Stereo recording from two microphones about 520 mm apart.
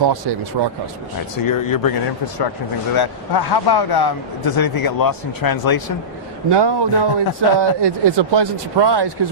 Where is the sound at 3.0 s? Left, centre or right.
Left.